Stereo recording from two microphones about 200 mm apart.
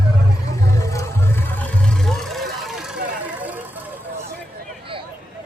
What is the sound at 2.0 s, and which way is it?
Vehicle, centre (ahead or behind).